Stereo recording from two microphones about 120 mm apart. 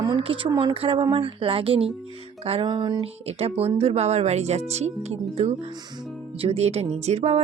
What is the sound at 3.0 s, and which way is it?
Speech, 55° right (ahead or behind).